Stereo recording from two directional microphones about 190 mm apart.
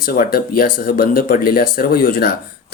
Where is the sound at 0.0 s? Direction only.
50° left (ahead or behind).